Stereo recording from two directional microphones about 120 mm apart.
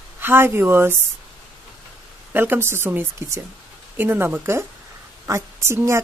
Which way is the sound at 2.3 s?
15° right (ahead or behind).